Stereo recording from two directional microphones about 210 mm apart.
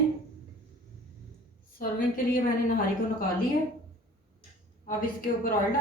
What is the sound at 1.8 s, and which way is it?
Speech, 40° left (ahead or behind).